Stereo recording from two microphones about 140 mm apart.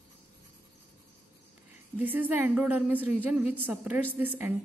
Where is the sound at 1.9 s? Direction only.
10° right (ahead or behind).